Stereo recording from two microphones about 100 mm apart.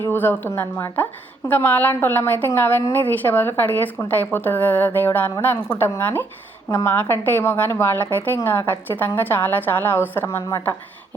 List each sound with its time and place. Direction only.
0.0 s a woman's voice: 20° left (ahead or behind)
6.7 s a woman's voice: 30° left (ahead or behind)